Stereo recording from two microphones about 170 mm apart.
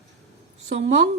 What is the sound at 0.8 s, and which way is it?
Speech, 90° right.